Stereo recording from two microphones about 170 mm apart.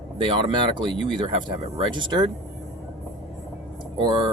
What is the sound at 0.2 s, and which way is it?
Speech, 30° right (ahead or behind).